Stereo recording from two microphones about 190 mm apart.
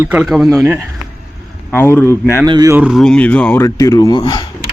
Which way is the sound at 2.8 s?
Centre (ahead or behind).